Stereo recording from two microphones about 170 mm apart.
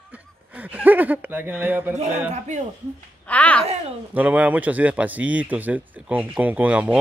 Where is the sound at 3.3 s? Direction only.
10° left (ahead or behind).